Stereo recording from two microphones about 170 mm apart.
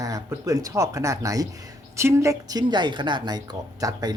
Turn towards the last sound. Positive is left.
turn(degrees=-20)  # may be behind; listen again after turning